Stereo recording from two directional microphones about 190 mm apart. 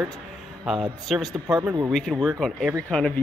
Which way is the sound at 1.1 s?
Centre (ahead or behind).